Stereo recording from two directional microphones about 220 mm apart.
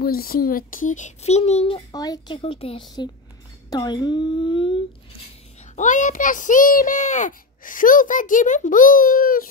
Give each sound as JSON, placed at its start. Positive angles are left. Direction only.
{"t": 0.0, "sound": "a child's voice", "side_deg": 45}
{"t": 1.8, "sound": "speech", "side_deg": 15}
{"t": 5.8, "sound": "a child's voice", "side_deg": 35}